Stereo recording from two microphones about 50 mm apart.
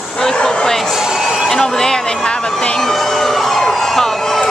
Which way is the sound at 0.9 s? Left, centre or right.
Centre.